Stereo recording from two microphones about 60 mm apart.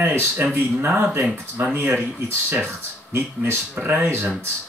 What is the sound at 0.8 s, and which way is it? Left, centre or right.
Speech, right.